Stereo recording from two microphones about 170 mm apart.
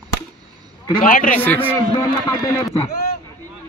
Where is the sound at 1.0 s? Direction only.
55° left (ahead or behind).